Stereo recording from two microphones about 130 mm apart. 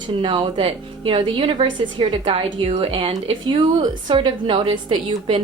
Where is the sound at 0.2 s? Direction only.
45° right (ahead or behind).